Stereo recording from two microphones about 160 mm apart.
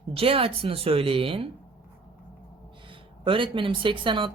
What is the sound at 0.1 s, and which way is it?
Speech, 35° right (ahead or behind).